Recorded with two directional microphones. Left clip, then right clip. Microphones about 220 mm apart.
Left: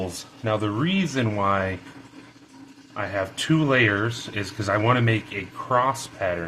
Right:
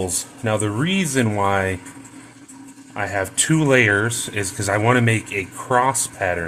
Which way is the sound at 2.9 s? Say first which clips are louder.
Right 4 dB; 35° right (ahead or behind).